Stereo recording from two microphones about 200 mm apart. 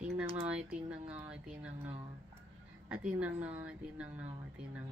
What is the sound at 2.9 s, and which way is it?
A woman's voice, 5° right (ahead or behind).